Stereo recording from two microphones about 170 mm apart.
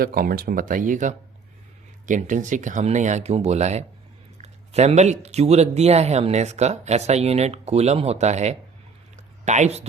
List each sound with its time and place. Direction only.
0.0 s speech: 60° right (ahead or behind); by 9.8 s 40° right (ahead or behind)